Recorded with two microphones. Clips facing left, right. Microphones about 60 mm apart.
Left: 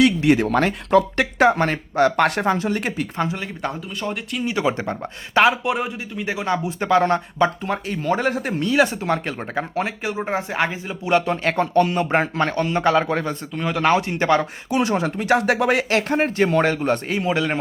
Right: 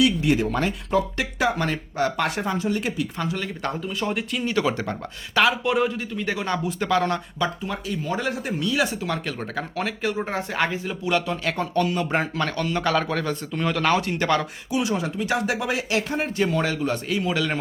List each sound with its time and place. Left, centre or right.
0.0 s speech: left
3.2 s speech: centre
3.6 s speech: centre
4.5 s speech: left
5.6 s speech: centre
6.7 s a man's voice: left
7.6 s speech: left
9.0 s speech: left
10.0 s speech: centre
11.1 s a man's voice: left
13.6 s speech: centre
13.8 s speech: left
14.7 s speech: left